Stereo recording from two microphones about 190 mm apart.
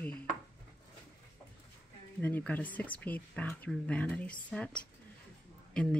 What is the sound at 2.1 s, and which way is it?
Speech, 10° left (ahead or behind).